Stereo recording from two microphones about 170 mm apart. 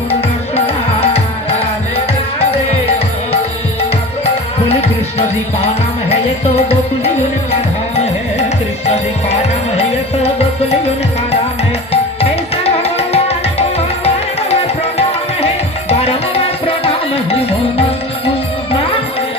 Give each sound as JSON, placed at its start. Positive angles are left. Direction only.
{"t": 0.1, "sound": "music", "side_deg": 35}
{"t": 6.1, "sound": "music", "side_deg": 35}
{"t": 8.9, "sound": "music", "side_deg": 40}
{"t": 11.9, "sound": "music", "side_deg": 35}